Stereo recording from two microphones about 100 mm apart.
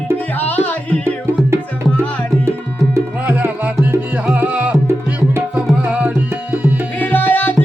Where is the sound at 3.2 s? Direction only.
15° right (ahead or behind).